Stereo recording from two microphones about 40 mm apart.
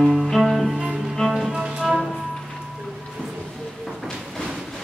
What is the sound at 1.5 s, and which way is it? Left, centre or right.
Music, right.